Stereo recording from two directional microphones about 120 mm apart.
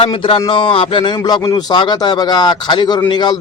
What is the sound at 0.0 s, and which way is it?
Speech, 45° left (ahead or behind).